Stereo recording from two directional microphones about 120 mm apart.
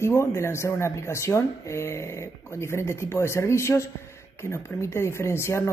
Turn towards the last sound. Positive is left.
turn(degrees=20)  # may be behind; listen again after turning